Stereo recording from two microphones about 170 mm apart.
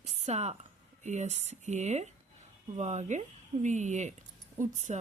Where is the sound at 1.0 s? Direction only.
45° right (ahead or behind).